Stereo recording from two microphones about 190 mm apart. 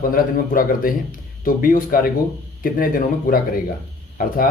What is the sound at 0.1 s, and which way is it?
Speech, 50° left (ahead or behind).